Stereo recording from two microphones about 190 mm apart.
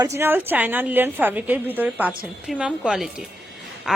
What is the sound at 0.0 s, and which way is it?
A woman's voice, 15° right (ahead or behind).